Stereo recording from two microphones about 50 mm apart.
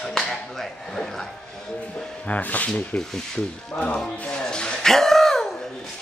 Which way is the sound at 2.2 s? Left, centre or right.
Left.